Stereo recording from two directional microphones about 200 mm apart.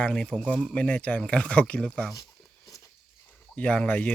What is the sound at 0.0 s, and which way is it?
Speech, 5° left (ahead or behind).